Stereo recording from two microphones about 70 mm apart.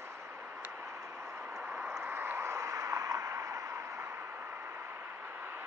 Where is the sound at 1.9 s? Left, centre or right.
Right.